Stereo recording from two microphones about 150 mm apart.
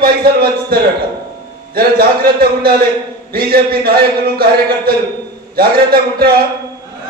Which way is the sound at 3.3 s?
90° right.